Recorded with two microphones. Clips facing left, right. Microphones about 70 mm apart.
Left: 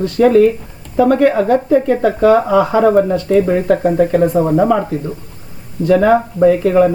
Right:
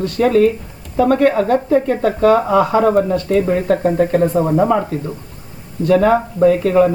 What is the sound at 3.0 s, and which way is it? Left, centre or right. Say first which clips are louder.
Speech: left 3 dB; centre.